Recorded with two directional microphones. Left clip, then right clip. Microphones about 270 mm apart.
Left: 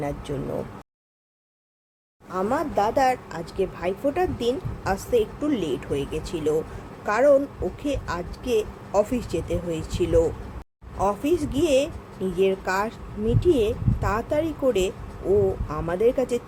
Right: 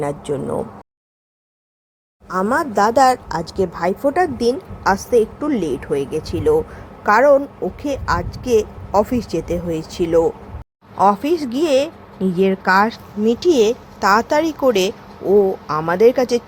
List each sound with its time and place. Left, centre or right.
0.0 s a woman's voice: centre
2.3 s a woman's voice: right